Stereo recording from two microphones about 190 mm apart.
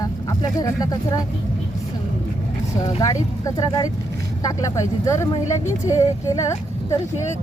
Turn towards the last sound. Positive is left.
turn(degrees=15)  # may be behind; listen again after turning